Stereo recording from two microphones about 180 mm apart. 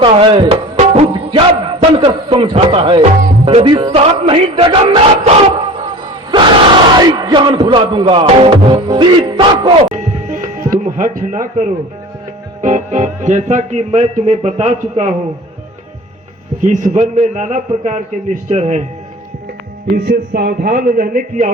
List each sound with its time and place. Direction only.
0.0 s music: 30° right (ahead or behind)
7.0 s music: 20° right (ahead or behind)
9.9 s music: 45° right (ahead or behind)
12.6 s speech: 45° right (ahead or behind)
16.6 s speech: 45° right (ahead or behind)
20.1 s a man's voice: 60° right (ahead or behind)